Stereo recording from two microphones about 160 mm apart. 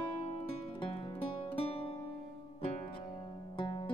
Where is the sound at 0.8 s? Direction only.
35° left (ahead or behind).